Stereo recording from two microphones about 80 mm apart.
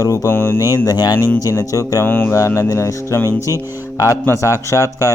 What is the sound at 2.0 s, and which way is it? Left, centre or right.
Speech, left.